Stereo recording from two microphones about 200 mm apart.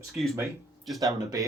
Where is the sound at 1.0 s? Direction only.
20° right (ahead or behind).